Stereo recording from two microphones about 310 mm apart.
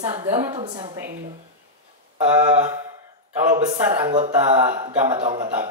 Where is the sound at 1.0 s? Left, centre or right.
Right.